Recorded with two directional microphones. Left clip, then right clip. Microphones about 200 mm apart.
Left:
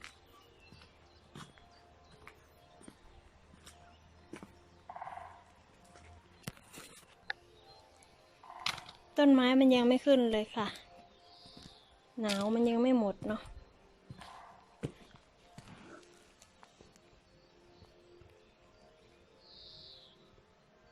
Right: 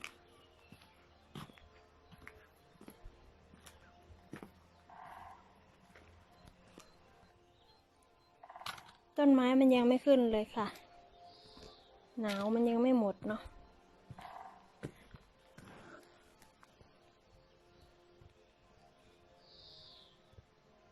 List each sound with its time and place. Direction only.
4.9 s music: 40° left (ahead or behind)
9.1 s a woman's voice: 5° right (ahead or behind)
12.2 s speech: 10° left (ahead or behind)
12.5 s a woman's voice: centre (ahead or behind)
14.8 s a sound: 10° left (ahead or behind)